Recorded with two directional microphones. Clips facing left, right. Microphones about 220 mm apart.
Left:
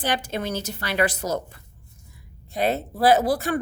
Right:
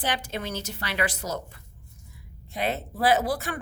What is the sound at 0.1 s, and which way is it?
A woman's voice, 40° left (ahead or behind).